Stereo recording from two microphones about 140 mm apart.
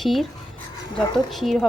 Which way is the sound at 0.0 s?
Centre (ahead or behind).